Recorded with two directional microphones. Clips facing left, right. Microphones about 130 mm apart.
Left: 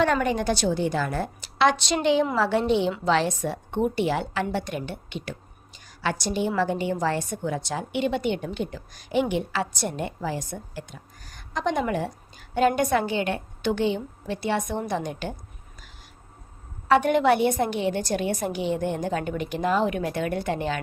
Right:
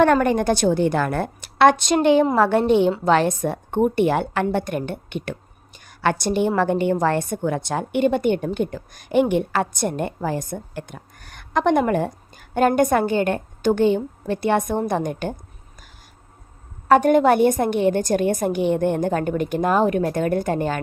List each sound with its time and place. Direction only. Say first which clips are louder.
0.0 s a woman's voice: right 6 dB; 50° right (ahead or behind)
16.9 s a woman's voice: right 5 dB; 45° right (ahead or behind)